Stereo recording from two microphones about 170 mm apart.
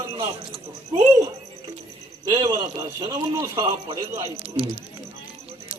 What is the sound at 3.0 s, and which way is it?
A man's voice, 20° right (ahead or behind).